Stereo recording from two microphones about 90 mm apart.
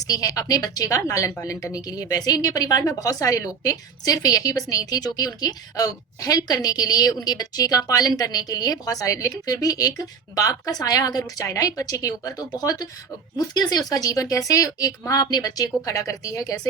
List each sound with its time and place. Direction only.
0.1 s a woman's voice: 45° left (ahead or behind)